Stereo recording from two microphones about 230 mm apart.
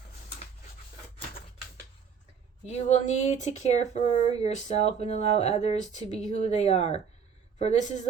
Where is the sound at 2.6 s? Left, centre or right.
Left.